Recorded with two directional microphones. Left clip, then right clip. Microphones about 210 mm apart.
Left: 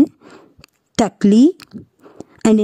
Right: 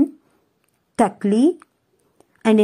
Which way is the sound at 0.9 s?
50° left (ahead or behind).